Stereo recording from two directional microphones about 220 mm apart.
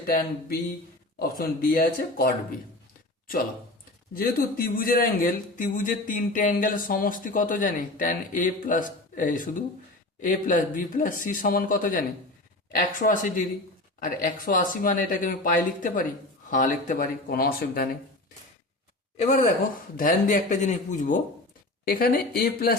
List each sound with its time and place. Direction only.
0.1 s speech: 40° left (ahead or behind)
4.1 s speech: 45° left (ahead or behind)
13.0 s speech: 35° left (ahead or behind)
19.1 s speech: 30° left (ahead or behind)